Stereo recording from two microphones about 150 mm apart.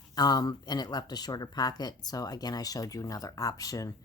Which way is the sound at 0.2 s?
25° left (ahead or behind).